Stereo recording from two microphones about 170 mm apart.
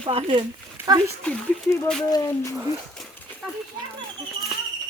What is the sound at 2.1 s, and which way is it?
Speech, 20° left (ahead or behind).